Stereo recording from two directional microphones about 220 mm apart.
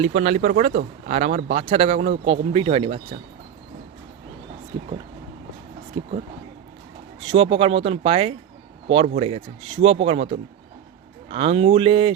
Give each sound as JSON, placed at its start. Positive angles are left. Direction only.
{"t": 0.0, "sound": "speech", "side_deg": -30}
{"t": 4.7, "sound": "speech", "side_deg": -20}
{"t": 6.0, "sound": "speech", "side_deg": -20}
{"t": 7.3, "sound": "speech", "side_deg": -25}
{"t": 11.3, "sound": "speech", "side_deg": -25}